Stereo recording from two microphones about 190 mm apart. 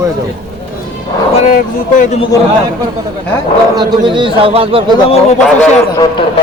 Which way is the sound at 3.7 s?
25° right (ahead or behind).